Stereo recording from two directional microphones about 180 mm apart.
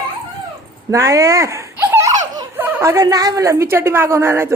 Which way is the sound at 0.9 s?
20° right (ahead or behind).